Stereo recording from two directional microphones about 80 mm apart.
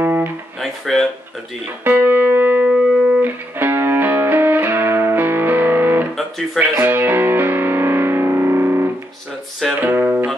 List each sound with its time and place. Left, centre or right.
0.0 s guitar: right
0.6 s music: centre
1.9 s music: right
6.1 s guitar: centre
6.8 s music: right
9.8 s speech: right